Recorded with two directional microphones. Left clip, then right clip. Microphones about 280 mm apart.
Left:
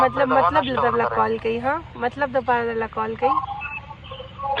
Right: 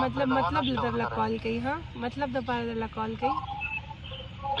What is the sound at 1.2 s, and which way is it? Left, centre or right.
Speech, left.